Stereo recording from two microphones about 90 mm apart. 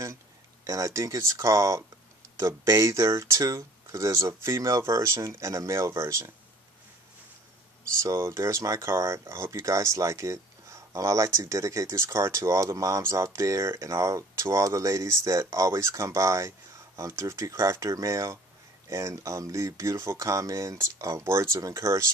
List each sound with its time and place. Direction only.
0.7 s speech: 35° right (ahead or behind)
8.0 s speech: 30° right (ahead or behind)